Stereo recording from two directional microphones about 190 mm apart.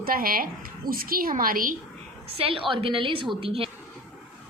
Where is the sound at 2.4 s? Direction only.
30° right (ahead or behind).